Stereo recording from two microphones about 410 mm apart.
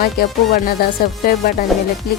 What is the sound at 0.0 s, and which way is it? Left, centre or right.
Speech, left.